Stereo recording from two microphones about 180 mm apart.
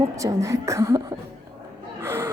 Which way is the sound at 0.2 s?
15° right (ahead or behind).